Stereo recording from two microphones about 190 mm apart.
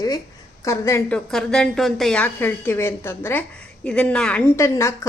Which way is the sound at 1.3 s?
5° left (ahead or behind).